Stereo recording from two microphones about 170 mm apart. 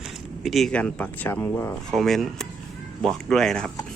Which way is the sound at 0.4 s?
Centre (ahead or behind).